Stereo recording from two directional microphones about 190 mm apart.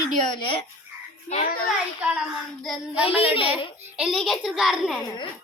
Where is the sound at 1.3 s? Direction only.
50° left (ahead or behind).